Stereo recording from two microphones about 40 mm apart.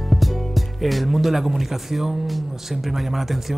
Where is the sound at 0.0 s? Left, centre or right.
Centre.